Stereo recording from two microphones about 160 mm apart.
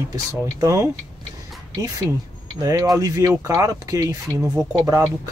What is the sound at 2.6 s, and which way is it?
A man's voice, 20° right (ahead or behind).